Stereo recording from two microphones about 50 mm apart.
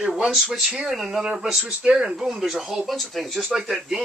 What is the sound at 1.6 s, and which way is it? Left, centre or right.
A man's voice, right.